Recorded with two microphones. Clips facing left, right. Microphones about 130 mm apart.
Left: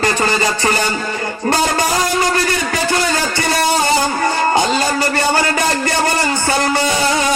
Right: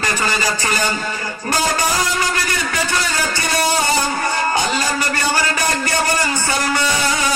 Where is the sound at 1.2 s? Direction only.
25° left (ahead or behind).